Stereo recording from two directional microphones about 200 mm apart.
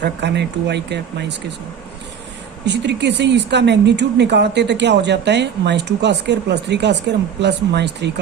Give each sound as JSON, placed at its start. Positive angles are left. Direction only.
{"t": 0.0, "sound": "speech", "side_deg": -60}
{"t": 2.6, "sound": "speech", "side_deg": -60}